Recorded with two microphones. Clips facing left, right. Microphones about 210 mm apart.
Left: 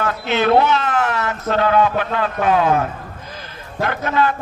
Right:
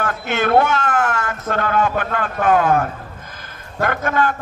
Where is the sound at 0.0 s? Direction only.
50° right (ahead or behind).